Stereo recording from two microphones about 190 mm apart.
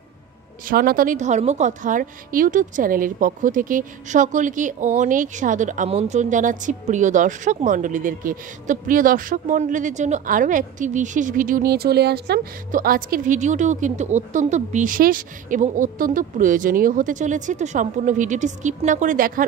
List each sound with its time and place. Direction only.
0.7 s a woman's voice: 50° right (ahead or behind)